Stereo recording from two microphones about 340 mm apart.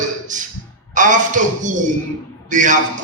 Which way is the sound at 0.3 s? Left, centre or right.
Right.